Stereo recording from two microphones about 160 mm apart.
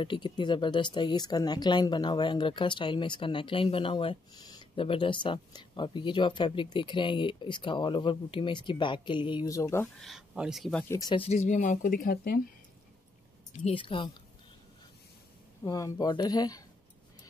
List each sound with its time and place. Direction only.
0.0 s speech: 30° left (ahead or behind)
9.9 s speech: centre (ahead or behind)
10.9 s speech: 20° left (ahead or behind)
11.1 s speech: 45° left (ahead or behind); by 12.4 s 70° left (ahead or behind)
13.7 s speech: 30° left (ahead or behind)
15.6 s speech: 20° left (ahead or behind)